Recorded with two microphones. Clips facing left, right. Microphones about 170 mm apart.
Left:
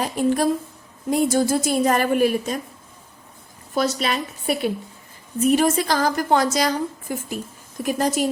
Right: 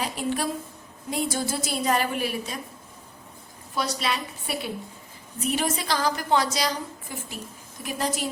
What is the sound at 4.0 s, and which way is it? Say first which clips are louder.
A woman's voice: left 5 dB; 55° left (ahead or behind).